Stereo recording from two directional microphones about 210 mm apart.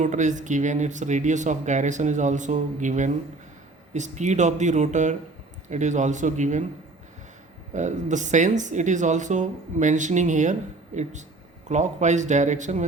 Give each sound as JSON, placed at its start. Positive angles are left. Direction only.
{"t": 0.0, "sound": "speech", "side_deg": -35}
{"t": 7.7, "sound": "speech", "side_deg": -35}